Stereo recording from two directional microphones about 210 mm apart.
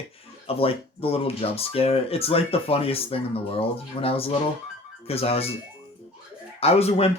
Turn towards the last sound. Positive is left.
turn(degrees=30)  # may be behind; listen again after turning